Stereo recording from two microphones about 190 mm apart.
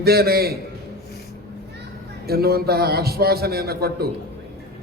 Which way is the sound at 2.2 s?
55° right (ahead or behind).